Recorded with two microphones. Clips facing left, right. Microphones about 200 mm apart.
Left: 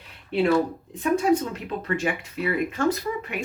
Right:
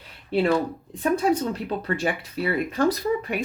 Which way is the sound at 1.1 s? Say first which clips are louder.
Left 1 dB; 35° right (ahead or behind).